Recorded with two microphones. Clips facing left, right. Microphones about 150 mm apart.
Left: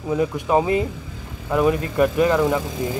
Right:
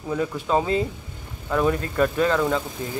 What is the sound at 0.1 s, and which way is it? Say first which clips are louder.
Speech: left 4 dB; 15° left (ahead or behind).